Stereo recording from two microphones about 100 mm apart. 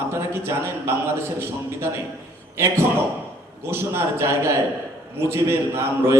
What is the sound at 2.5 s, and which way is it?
A man's voice, 25° right (ahead or behind).